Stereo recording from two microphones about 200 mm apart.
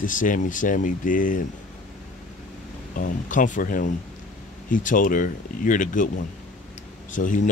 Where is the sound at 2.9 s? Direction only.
40° left (ahead or behind).